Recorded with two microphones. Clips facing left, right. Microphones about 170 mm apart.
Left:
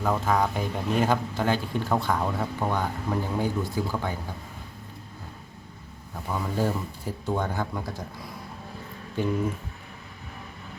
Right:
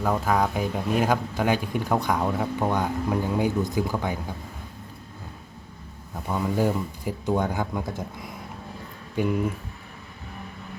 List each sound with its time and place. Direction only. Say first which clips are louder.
0.0 s speech: right 1 dB; 10° right (ahead or behind)
6.2 s speech: right 3 dB; 20° right (ahead or behind)
9.2 s speech: right 2 dB; 15° right (ahead or behind)